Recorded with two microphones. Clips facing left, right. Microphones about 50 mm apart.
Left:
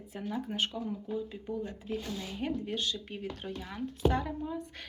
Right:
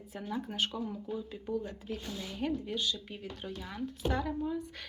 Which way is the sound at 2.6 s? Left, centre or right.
Left.